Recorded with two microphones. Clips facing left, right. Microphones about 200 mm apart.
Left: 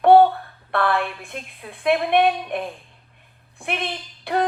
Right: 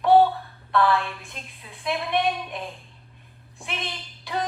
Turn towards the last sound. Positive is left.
turn(degrees=60)  # may be behind; listen again after turning